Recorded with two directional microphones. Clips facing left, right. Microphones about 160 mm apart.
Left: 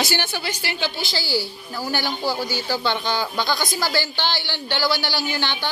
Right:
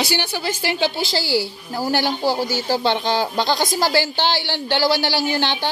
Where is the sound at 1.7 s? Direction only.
35° right (ahead or behind).